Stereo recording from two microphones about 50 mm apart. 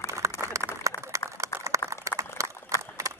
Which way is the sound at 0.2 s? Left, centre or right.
Right.